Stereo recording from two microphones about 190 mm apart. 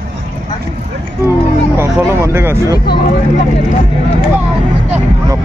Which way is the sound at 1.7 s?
15° right (ahead or behind).